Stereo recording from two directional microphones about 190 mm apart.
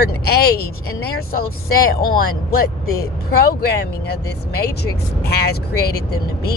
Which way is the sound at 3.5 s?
55° left (ahead or behind).